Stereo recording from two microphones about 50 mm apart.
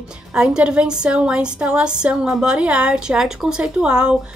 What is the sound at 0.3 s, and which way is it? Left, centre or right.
A woman's voice, centre.